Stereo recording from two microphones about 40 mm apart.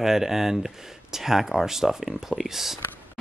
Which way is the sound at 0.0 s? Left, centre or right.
Centre.